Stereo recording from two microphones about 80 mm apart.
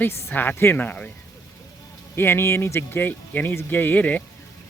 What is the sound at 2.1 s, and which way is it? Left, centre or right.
Speech, left.